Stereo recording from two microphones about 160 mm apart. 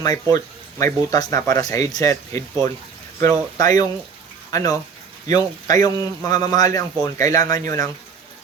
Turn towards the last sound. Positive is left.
turn(degrees=20)  # may be behind; listen again after turning